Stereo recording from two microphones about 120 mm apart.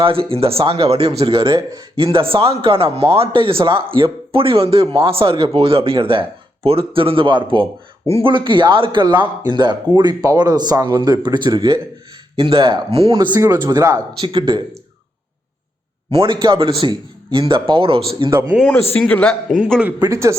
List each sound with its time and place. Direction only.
0.0 s speech: 50° right (ahead or behind)
1.5 s speech: 25° right (ahead or behind)
2.0 s speech: 50° right (ahead or behind)
13.7 s speech: 25° right (ahead or behind)
14.2 s speech: 40° right (ahead or behind)
16.1 s speech: 45° right (ahead or behind)
18.9 s a man's voice: 10° left (ahead or behind)
20.0 s speech: 25° right (ahead or behind)